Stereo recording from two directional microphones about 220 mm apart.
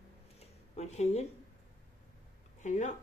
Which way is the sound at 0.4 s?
30° left (ahead or behind).